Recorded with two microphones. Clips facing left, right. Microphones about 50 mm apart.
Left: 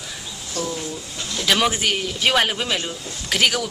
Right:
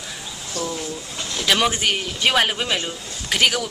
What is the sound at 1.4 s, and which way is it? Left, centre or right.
Speech, centre.